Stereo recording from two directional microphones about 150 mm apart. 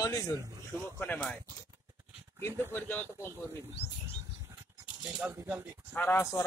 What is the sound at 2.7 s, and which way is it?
Speech, 15° left (ahead or behind).